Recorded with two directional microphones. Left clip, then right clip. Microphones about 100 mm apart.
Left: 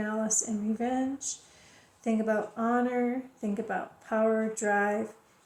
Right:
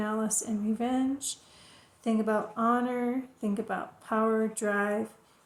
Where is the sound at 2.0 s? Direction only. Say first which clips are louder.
Even; 60° right (ahead or behind).